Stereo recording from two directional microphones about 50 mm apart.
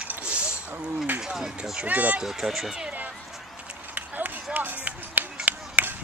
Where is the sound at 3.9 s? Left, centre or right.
Right.